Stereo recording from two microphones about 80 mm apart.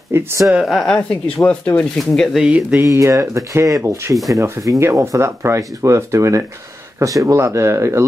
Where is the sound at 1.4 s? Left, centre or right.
Centre.